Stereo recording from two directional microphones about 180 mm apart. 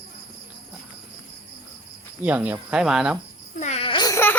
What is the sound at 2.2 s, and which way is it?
Speech, 10° right (ahead or behind).